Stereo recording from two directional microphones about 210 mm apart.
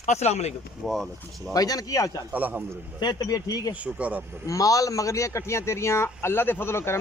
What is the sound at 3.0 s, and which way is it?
Speech, 20° left (ahead or behind).